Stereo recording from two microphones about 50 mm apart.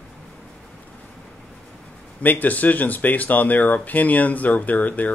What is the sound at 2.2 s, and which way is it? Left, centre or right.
A man's voice, left.